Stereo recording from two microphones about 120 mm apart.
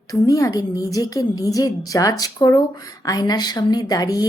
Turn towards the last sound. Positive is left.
turn(degrees=30)  # may be behind; listen again after turning